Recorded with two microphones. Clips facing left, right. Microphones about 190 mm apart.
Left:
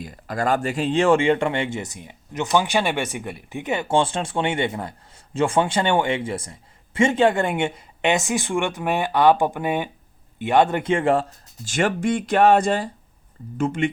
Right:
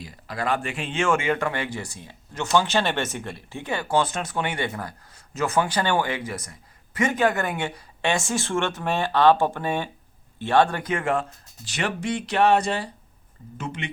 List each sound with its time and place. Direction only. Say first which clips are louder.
0.0 s speech: left 5 dB; 45° left (ahead or behind)
11.6 s speech: left 6 dB; 45° left (ahead or behind)